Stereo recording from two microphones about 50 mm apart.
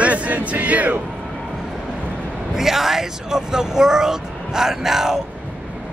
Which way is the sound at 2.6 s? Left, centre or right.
Centre.